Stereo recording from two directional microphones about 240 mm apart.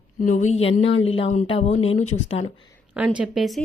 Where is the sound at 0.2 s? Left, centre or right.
Left.